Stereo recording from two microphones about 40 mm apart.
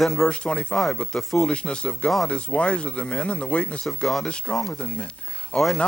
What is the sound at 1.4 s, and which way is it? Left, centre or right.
Speech, left.